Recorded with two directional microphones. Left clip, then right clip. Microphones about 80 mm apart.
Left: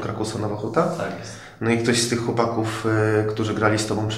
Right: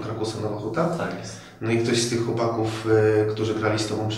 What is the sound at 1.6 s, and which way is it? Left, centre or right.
Speech, left.